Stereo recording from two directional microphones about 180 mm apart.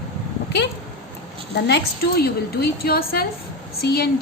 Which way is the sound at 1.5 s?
65° left (ahead or behind).